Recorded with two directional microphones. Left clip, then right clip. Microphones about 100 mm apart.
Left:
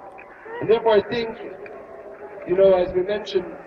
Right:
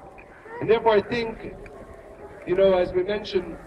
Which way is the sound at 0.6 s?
30° left (ahead or behind).